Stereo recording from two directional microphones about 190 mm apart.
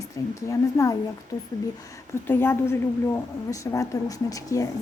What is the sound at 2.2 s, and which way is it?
A woman's voice, 10° left (ahead or behind).